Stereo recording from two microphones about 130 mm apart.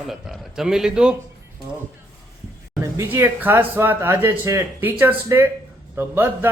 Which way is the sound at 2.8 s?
15° right (ahead or behind).